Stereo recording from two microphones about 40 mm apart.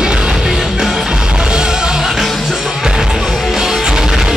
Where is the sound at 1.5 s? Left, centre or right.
Centre.